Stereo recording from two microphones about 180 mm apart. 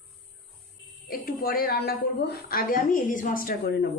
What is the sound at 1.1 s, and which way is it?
A woman's voice, 55° left (ahead or behind).